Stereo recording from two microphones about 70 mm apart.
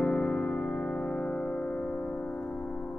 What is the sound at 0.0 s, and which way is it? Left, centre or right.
Music, centre.